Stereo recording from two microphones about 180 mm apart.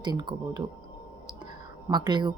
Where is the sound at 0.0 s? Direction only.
25° right (ahead or behind).